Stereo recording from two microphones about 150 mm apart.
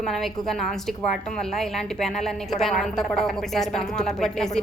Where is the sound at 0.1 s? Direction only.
Centre (ahead or behind).